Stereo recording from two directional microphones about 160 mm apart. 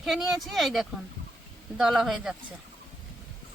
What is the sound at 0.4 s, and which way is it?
Speech, centre (ahead or behind).